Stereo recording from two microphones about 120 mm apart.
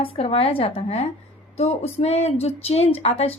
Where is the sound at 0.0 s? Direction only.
50° left (ahead or behind).